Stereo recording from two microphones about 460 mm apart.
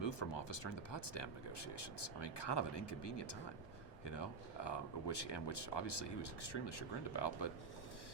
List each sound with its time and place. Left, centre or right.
0.0 s speech: left